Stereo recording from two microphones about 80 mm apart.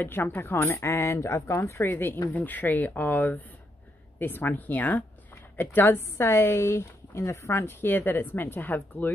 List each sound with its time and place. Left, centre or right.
0.0 s speech: left
1.9 s speech: left